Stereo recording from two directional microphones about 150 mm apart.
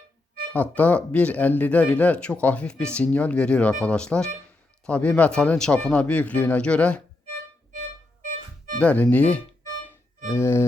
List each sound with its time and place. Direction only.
0.5 s speech: 10° left (ahead or behind)
8.2 s music: 60° right (ahead or behind)
8.8 s speech: 10° left (ahead or behind)